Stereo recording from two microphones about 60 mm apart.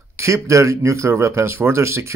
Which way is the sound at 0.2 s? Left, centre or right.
Right.